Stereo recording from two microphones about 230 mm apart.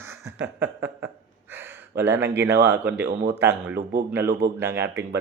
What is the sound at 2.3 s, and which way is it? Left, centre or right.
Speech, centre.